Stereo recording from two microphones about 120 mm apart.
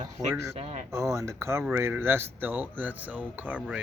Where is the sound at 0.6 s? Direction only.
65° right (ahead or behind).